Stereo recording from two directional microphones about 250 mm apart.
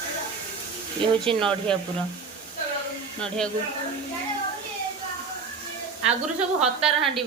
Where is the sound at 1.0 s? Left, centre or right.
Centre.